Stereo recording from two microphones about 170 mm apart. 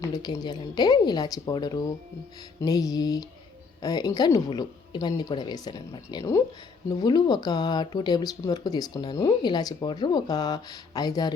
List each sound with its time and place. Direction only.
0.0 s speech: 25° left (ahead or behind)